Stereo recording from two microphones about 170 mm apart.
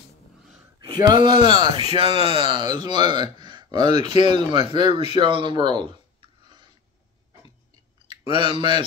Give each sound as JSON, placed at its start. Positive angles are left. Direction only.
{"t": 0.7, "sound": "speech", "side_deg": -25}
{"t": 5.1, "sound": "a sound", "side_deg": -30}
{"t": 8.1, "sound": "speech", "side_deg": -25}